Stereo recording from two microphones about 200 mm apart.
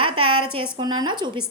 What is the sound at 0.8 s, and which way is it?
Speech, 20° right (ahead or behind).